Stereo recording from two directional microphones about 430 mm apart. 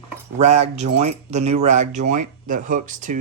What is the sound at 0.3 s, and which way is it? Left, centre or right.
Speech, centre.